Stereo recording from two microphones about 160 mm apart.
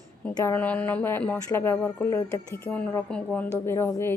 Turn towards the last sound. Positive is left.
turn(degrees=15)  # may be behind; listen again after turning